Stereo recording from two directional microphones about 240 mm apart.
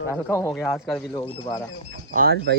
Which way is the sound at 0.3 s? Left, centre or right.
Centre.